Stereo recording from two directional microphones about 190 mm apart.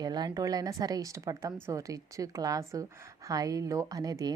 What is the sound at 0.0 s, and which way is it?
A woman's voice, 20° right (ahead or behind).